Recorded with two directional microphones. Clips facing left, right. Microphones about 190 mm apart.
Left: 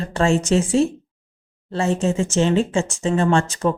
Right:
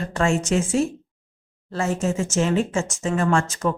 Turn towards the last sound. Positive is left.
turn(degrees=30)  # may be behind; listen again after turning